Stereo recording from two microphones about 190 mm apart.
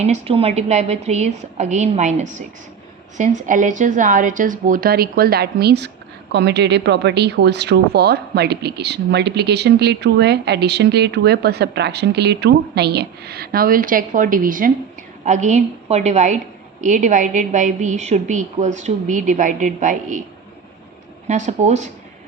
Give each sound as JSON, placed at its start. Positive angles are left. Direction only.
{"t": 0.0, "sound": "a woman's voice", "side_deg": -30}
{"t": 21.2, "sound": "a woman's voice", "side_deg": -40}